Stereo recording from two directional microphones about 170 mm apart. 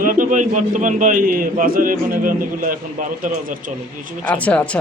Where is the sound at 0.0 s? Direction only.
50° right (ahead or behind).